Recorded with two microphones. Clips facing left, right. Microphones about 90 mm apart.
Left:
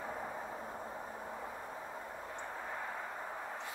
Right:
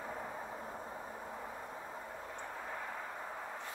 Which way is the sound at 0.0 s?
5° left (ahead or behind).